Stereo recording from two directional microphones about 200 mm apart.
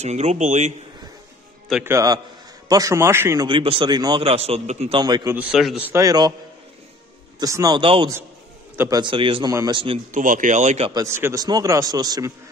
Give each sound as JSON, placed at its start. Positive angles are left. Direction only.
{"t": 0.0, "sound": "speech", "side_deg": -35}
{"t": 1.9, "sound": "a man's voice", "side_deg": -15}
{"t": 3.4, "sound": "a man's voice", "side_deg": -25}
{"t": 5.3, "sound": "a man's voice", "side_deg": -5}
{"t": 7.3, "sound": "a man's voice", "side_deg": -20}
{"t": 10.1, "sound": "speech", "side_deg": -40}
{"t": 10.9, "sound": "a man's voice", "side_deg": -15}